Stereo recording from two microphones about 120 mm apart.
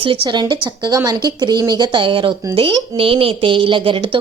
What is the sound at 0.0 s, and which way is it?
A woman's voice, 45° right (ahead or behind).